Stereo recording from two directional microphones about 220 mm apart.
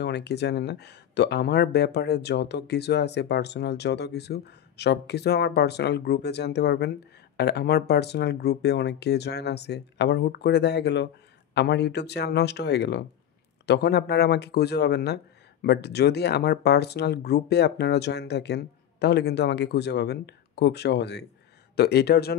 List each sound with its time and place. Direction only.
0.0 s speech: 50° left (ahead or behind)